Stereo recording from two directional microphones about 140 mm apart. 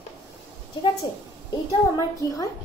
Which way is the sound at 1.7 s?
25° left (ahead or behind).